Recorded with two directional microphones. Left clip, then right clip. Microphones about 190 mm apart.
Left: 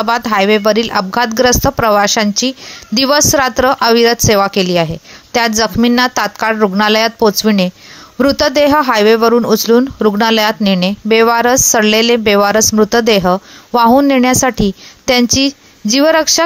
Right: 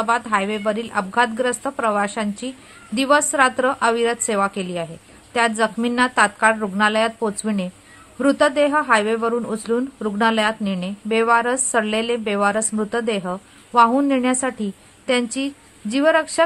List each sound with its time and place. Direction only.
0.0 s speech: 40° left (ahead or behind)